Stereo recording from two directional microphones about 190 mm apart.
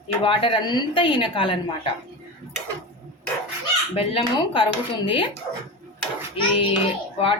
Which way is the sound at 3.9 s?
30° left (ahead or behind).